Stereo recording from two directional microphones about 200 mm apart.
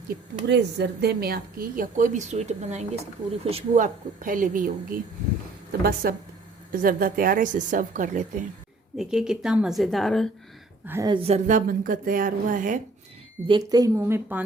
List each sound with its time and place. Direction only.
0.4 s a woman's voice: 60° right (ahead or behind); by 8.4 s 40° right (ahead or behind)
9.0 s speech: 5° right (ahead or behind)
10.8 s a woman's voice: 10° right (ahead or behind)
11.1 s speech: 30° right (ahead or behind)
11.4 s a woman's voice: 40° right (ahead or behind)
13.5 s a woman's voice: 20° right (ahead or behind)